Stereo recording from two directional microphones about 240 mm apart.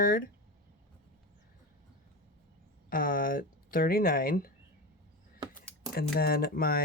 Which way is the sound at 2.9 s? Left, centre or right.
Left.